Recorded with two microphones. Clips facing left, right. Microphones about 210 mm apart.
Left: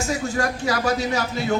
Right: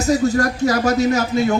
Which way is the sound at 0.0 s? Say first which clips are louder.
Right 7 dB; 40° right (ahead or behind).